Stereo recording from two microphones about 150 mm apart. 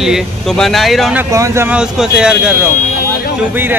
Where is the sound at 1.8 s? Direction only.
5° right (ahead or behind).